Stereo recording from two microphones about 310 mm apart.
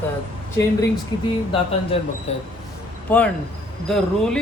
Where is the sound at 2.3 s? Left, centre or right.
Left.